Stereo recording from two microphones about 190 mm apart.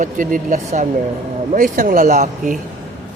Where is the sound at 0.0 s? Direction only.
45° right (ahead or behind).